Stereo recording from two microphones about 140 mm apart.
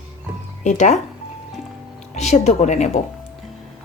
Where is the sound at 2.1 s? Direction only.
55° left (ahead or behind).